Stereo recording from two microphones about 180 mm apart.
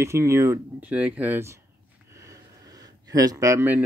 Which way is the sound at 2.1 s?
20° right (ahead or behind).